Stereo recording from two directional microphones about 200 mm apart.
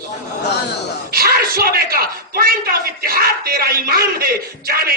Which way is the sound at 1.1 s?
50° right (ahead or behind).